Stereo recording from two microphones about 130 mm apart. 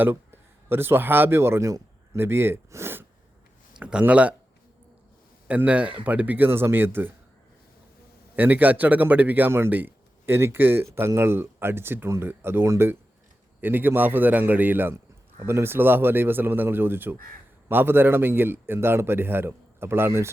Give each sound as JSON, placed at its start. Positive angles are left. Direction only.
{"t": 0.0, "sound": "speech", "side_deg": -15}
{"t": 3.8, "sound": "speech", "side_deg": -5}
{"t": 5.5, "sound": "speech", "side_deg": -10}
{"t": 8.4, "sound": "speech", "side_deg": -15}